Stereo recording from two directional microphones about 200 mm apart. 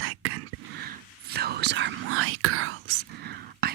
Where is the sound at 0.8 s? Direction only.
50° right (ahead or behind); by 3.1 s 90° right.